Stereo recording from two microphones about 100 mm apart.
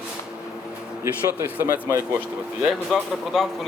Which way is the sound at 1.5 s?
30° right (ahead or behind).